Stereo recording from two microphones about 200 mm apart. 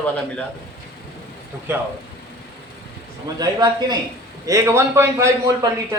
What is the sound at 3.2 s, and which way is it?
A man's voice, 20° right (ahead or behind).